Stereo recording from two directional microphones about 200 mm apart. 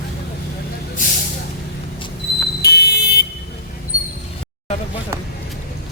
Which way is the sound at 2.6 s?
55° left (ahead or behind).